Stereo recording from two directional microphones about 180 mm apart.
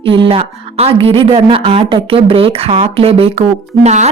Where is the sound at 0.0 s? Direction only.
30° right (ahead or behind).